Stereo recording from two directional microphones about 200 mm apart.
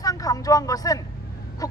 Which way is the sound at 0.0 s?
20° left (ahead or behind).